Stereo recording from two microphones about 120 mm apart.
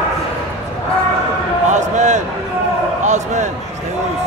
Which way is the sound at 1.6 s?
80° right.